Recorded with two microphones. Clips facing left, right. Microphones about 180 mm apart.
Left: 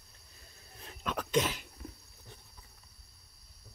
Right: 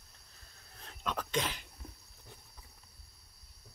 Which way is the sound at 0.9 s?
10° left (ahead or behind).